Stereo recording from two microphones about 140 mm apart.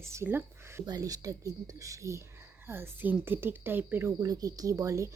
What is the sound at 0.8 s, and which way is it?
Speech, 25° right (ahead or behind).